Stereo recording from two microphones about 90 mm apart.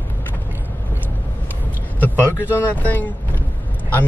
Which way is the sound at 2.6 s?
20° left (ahead or behind).